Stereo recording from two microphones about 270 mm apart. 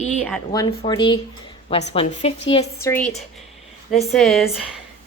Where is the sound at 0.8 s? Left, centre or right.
Centre.